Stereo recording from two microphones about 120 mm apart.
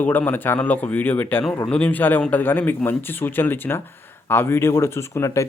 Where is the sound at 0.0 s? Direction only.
15° left (ahead or behind).